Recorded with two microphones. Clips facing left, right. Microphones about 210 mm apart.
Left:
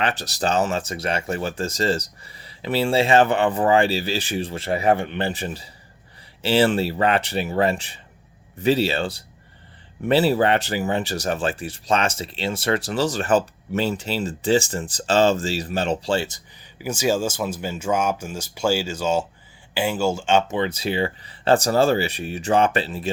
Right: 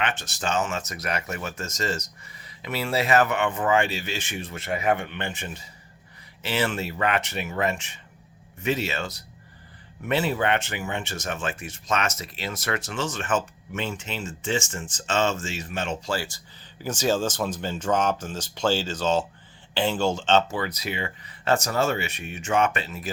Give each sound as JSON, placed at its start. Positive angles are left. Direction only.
{"t": 0.0, "sound": "speech", "side_deg": 35}
{"t": 16.8, "sound": "speech", "side_deg": 10}
{"t": 20.6, "sound": "speech", "side_deg": 30}